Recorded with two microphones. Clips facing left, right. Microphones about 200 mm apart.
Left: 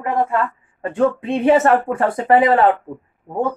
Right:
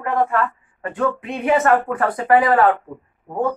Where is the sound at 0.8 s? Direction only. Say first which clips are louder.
Left 4 dB; 30° left (ahead or behind).